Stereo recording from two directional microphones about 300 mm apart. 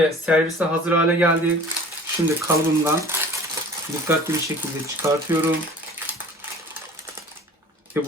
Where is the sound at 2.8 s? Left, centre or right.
Centre.